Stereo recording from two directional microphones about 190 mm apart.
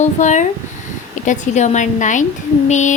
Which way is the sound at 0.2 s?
40° left (ahead or behind).